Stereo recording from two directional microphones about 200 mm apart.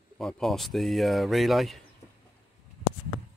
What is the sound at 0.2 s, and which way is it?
Speech, centre (ahead or behind).